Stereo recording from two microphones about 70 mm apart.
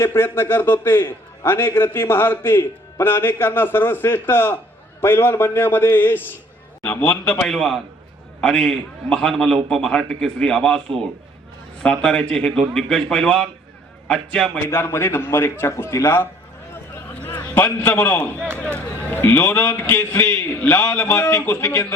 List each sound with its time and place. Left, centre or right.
0.2 s a man's voice: left
6.8 s a man's voice: centre
7.5 s a man's voice: centre
14.7 s a man's voice: left
17.5 s a man's voice: left
21.2 s a man's voice: left
21.4 s a man's voice: left